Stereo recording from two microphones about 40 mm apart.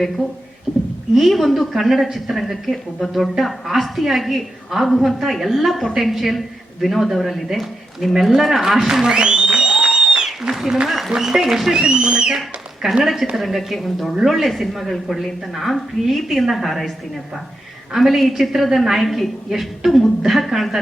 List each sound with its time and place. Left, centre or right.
1.1 s a woman's voice: centre
9.0 s music: right
10.5 s a man's voice: centre
11.7 s speech: right
12.4 s a woman's voice: centre
17.9 s a woman's voice: centre